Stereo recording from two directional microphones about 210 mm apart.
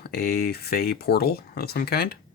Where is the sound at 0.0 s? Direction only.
45° left (ahead or behind).